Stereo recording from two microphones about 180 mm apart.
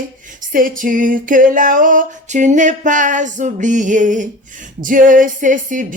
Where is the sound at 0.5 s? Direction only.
50° right (ahead or behind).